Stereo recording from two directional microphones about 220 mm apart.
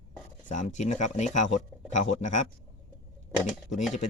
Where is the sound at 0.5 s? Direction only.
35° left (ahead or behind).